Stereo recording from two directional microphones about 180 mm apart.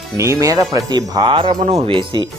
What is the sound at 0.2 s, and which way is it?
Speech, 15° right (ahead or behind).